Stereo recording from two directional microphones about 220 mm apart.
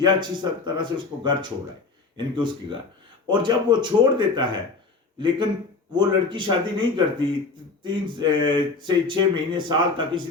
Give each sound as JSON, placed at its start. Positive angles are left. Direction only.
{"t": 0.0, "sound": "speech", "side_deg": -20}
{"t": 5.9, "sound": "speech", "side_deg": -20}